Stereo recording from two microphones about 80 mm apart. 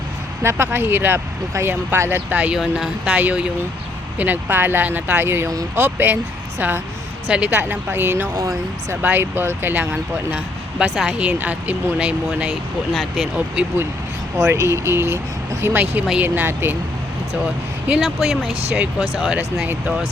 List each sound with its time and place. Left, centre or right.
0.4 s speech: right
2.6 s speech: centre
3.1 s speech: centre
7.3 s speech: centre
8.4 s speech: right
9.0 s speech: right
9.9 s speech: centre
12.9 s speech: centre
13.6 s speech: centre
14.3 s speech: right
17.8 s speech: centre